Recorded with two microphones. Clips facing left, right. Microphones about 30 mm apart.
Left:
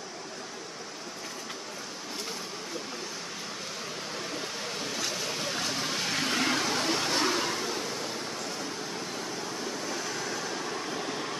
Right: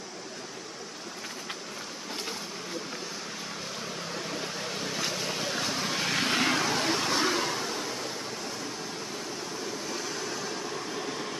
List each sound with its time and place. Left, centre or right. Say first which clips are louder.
5.4 s vehicle: right 1 dB; centre
6.0 s vehicle: right 2 dB; right
6.6 s vehicle: right 1 dB; centre
10.0 s a sound: left 1 dB; centre